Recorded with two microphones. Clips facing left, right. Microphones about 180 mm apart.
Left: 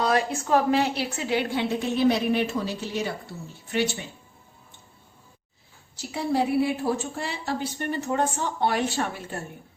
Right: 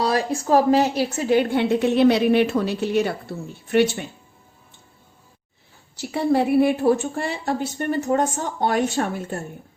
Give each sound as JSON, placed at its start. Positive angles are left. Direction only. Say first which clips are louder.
{"t": 0.0, "sound": "a woman's voice", "louder": "right 2 dB", "side_deg": -35}
{"t": 6.0, "sound": "a woman's voice", "louder": "right 5 dB", "side_deg": -60}